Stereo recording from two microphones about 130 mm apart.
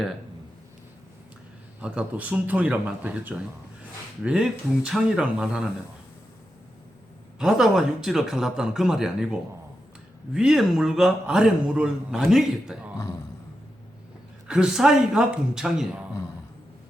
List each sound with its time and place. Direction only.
1.8 s speech: 10° right (ahead or behind)
7.3 s a man's voice: 5° right (ahead or behind)
13.0 s a sound: 25° left (ahead or behind)
14.4 s a man's voice: 5° right (ahead or behind)